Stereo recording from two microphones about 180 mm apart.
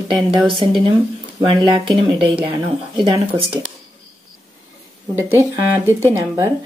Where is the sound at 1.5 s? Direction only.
30° right (ahead or behind).